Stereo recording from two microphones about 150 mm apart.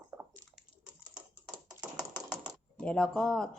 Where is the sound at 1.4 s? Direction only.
5° right (ahead or behind).